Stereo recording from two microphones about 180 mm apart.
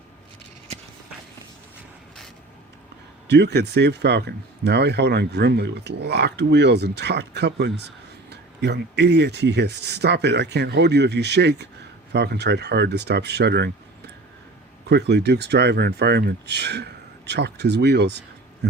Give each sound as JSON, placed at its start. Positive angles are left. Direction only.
{"t": 3.2, "sound": "speech", "side_deg": -70}
{"t": 14.8, "sound": "speech", "side_deg": -70}